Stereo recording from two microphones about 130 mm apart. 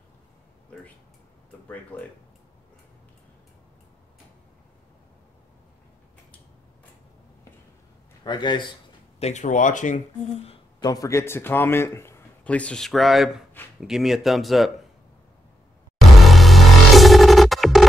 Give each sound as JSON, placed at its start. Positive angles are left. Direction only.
{"t": 8.2, "sound": "speech", "side_deg": 35}
{"t": 9.2, "sound": "speech", "side_deg": 65}
{"t": 10.8, "sound": "a man's voice", "side_deg": 25}
{"t": 16.3, "sound": "music", "side_deg": 0}